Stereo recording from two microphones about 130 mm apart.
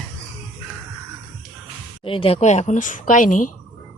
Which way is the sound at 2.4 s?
60° left (ahead or behind).